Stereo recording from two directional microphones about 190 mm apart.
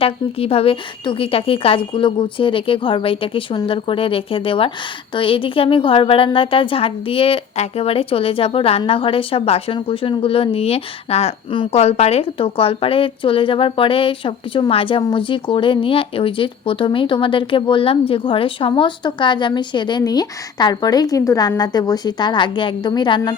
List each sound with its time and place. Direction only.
0.0 s a woman's voice: 30° left (ahead or behind)